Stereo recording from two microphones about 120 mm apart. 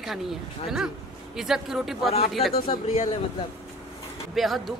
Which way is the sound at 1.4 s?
5° right (ahead or behind).